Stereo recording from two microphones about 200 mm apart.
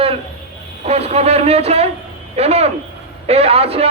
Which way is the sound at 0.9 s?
30° right (ahead or behind).